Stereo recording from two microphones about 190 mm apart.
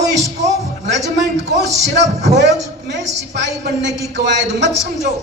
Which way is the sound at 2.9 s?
70° right (ahead or behind).